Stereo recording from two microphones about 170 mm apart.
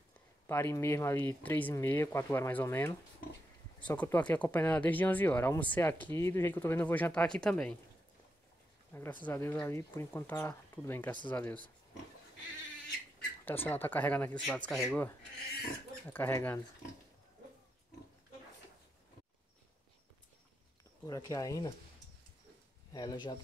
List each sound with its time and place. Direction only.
0.5 s speech: 15° left (ahead or behind)
9.2 s speech: 15° left (ahead or behind)
13.5 s speech: 10° left (ahead or behind)
16.1 s speech: 10° left (ahead or behind)
21.0 s speech: 20° left (ahead or behind)
22.9 s speech: 25° left (ahead or behind)